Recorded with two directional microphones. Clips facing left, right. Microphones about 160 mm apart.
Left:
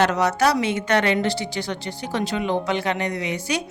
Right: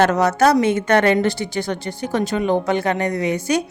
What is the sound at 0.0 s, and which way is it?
Speech, 50° right (ahead or behind).